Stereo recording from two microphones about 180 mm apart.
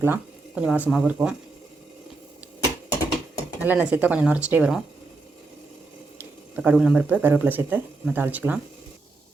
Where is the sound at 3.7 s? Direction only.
5° right (ahead or behind).